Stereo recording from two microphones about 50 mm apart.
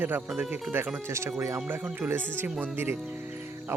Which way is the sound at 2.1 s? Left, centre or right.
Right.